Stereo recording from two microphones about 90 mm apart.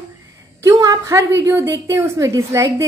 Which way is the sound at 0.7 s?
40° right (ahead or behind).